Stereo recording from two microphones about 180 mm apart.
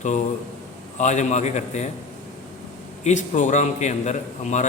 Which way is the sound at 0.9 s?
40° left (ahead or behind).